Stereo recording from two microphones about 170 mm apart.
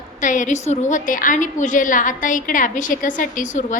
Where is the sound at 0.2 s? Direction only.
50° left (ahead or behind).